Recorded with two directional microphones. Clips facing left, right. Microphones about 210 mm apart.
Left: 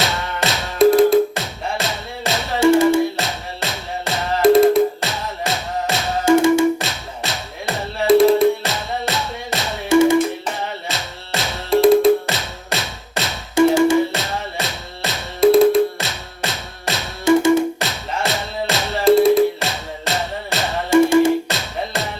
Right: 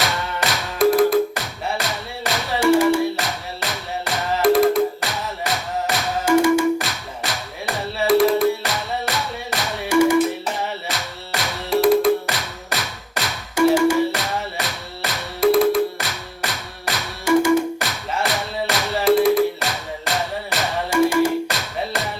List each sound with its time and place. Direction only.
0.0 s music: 25° left (ahead or behind)